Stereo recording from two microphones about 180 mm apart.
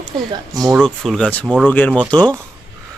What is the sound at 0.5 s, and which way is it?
Speech, 20° right (ahead or behind).